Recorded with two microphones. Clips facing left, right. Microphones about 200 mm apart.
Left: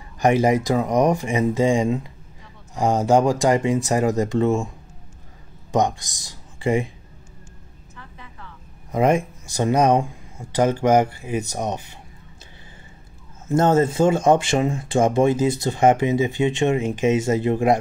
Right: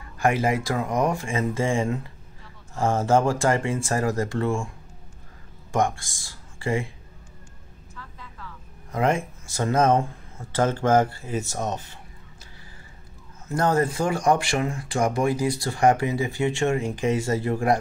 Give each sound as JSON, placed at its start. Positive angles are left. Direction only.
{"t": 0.2, "sound": "speech", "side_deg": 20}
{"t": 5.7, "sound": "speech", "side_deg": 20}
{"t": 7.9, "sound": "a sound", "side_deg": 20}
{"t": 8.9, "sound": "speech", "side_deg": 20}
{"t": 13.5, "sound": "speech", "side_deg": 25}